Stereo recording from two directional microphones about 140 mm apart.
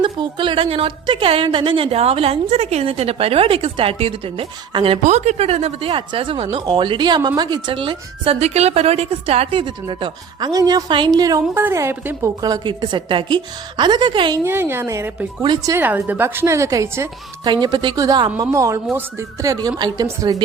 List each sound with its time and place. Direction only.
0.0 s a woman's voice: 35° right (ahead or behind)
5.0 s a woman's voice: 55° right (ahead or behind); by 14.3 s 35° right (ahead or behind)
14.4 s a woman's voice: 15° right (ahead or behind)
15.8 s a woman's voice: 15° right (ahead or behind)
17.4 s a woman's voice: 30° right (ahead or behind)